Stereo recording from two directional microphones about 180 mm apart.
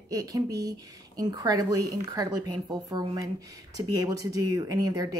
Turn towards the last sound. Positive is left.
turn(degrees=-20)  # may be behind; listen again after turning